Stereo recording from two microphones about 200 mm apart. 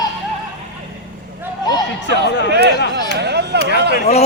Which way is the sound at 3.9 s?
30° left (ahead or behind).